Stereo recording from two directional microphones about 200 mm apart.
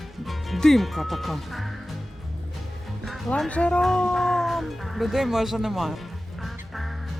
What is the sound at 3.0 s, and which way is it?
Speech, centre (ahead or behind).